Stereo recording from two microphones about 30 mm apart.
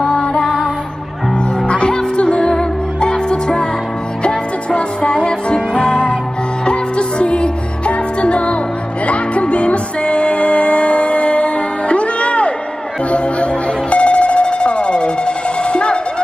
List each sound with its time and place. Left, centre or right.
0.2 s music: left
1.9 s music: left